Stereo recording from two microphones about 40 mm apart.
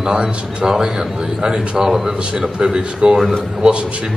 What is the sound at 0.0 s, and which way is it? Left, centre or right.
A man's voice, centre.